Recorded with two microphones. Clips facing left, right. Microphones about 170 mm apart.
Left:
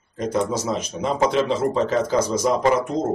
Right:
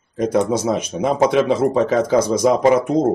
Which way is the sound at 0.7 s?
60° right (ahead or behind).